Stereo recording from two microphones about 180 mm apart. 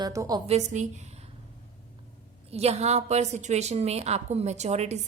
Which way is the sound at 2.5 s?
35° right (ahead or behind).